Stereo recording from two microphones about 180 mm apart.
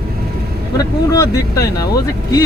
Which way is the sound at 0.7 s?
20° left (ahead or behind).